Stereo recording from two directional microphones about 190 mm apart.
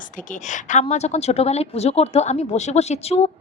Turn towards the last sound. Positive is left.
turn(degrees=35)  # may be behind; listen again after turning